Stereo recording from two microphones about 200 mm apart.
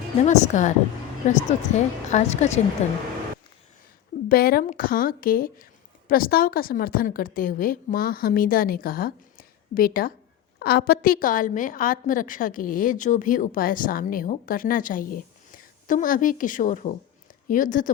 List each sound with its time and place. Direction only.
0.3 s a woman's voice: 35° left (ahead or behind)
4.3 s a woman's voice: 50° left (ahead or behind)